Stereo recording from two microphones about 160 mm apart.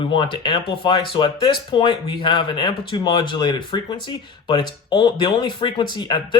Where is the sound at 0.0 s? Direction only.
30° left (ahead or behind).